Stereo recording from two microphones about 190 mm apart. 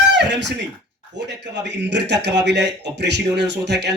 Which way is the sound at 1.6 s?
65° right (ahead or behind).